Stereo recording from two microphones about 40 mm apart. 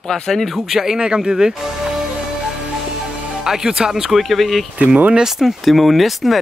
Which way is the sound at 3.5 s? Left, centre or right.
Centre.